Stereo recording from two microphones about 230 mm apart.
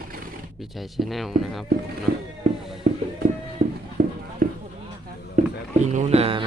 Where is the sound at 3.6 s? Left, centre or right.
Right.